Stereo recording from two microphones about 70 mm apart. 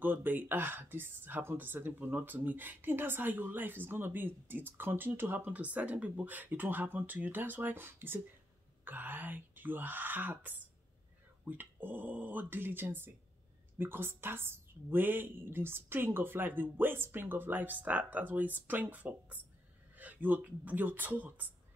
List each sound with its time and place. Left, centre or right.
0.0 s speech: right